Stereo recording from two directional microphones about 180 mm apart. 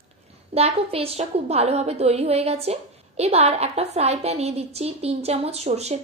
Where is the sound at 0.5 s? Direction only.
35° right (ahead or behind).